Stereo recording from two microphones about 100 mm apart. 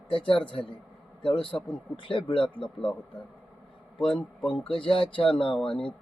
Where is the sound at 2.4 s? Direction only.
10° left (ahead or behind).